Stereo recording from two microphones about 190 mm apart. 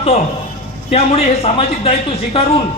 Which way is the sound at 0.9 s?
35° left (ahead or behind).